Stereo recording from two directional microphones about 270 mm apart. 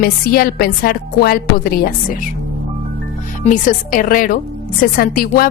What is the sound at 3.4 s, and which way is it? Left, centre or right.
A woman's voice, left.